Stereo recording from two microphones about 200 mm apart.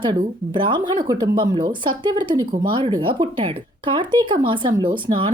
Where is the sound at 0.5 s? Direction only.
25° right (ahead or behind).